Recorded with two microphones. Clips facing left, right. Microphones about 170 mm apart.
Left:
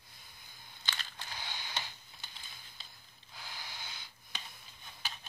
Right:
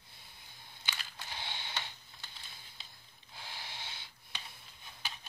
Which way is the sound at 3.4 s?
30° right (ahead or behind).